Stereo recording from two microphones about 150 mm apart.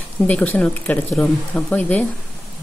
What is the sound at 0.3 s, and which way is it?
Speech, 10° left (ahead or behind).